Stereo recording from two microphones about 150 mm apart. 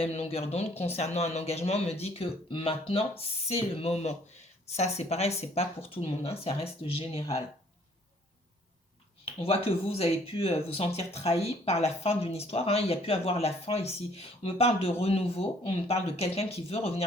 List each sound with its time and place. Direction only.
0.0 s speech: 40° left (ahead or behind)
9.4 s speech: 40° left (ahead or behind)